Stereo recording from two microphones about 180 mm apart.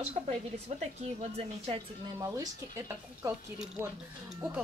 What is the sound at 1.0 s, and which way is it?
Speech, 35° right (ahead or behind).